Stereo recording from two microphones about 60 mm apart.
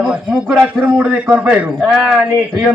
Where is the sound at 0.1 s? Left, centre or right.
Centre.